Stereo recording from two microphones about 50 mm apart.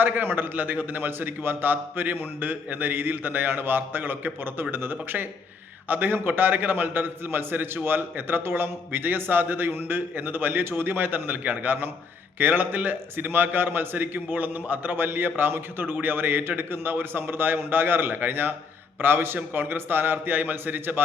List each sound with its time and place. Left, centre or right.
0.0 s a man's voice: right